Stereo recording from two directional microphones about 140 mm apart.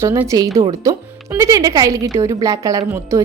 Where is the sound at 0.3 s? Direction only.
25° right (ahead or behind).